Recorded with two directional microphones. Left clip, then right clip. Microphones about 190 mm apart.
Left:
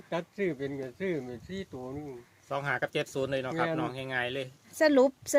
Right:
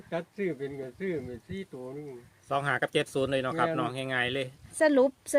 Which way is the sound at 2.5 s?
45° right (ahead or behind).